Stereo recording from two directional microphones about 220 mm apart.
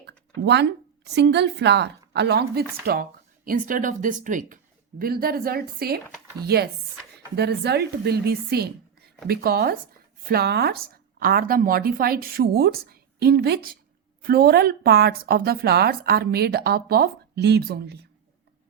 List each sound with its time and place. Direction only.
0.4 s a woman's voice: 50° right (ahead or behind)